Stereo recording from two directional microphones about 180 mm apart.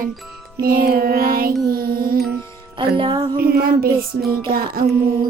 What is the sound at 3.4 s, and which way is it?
Speech, 55° right (ahead or behind).